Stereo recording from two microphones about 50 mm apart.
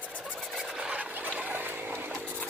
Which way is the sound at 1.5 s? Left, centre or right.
Right.